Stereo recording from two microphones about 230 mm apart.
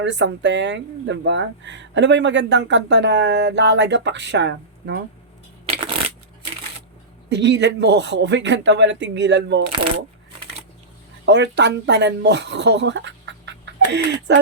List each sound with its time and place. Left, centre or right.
0.0 s speech: right
7.3 s speech: right
11.3 s speech: right